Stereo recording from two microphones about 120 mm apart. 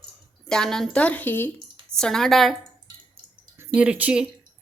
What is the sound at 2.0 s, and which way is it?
Speech, 5° left (ahead or behind).